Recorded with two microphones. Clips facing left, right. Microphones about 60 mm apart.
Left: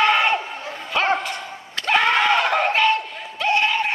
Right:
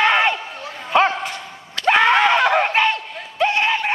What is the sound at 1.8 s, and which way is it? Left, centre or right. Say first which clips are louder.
Screaming: right 3 dB; right.